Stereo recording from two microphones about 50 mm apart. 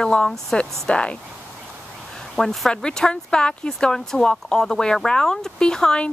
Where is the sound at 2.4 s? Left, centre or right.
Centre.